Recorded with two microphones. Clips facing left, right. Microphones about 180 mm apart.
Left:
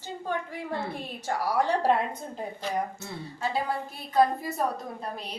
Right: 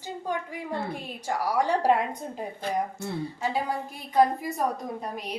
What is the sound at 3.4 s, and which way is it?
A woman's voice, 15° right (ahead or behind).